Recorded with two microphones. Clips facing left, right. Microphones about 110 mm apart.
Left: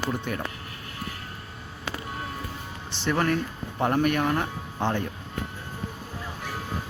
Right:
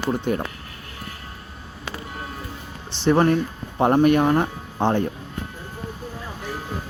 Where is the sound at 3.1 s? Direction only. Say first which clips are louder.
Right 7 dB; 30° right (ahead or behind).